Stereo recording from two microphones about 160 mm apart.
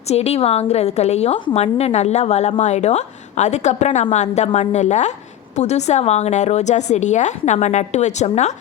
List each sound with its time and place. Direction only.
0.1 s a woman's voice: 40° left (ahead or behind)